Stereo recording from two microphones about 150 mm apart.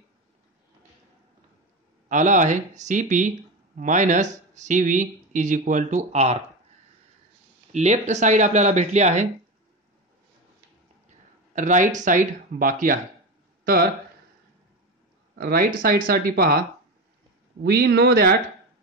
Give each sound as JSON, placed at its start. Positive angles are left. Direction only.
{"t": 2.0, "sound": "speech", "side_deg": -55}
{"t": 7.7, "sound": "speech", "side_deg": -50}
{"t": 11.5, "sound": "speech", "side_deg": -55}
{"t": 15.3, "sound": "speech", "side_deg": -75}
{"t": 17.6, "sound": "speech", "side_deg": -90}